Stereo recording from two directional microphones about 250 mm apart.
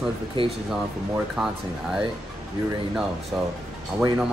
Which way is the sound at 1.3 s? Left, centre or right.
Centre.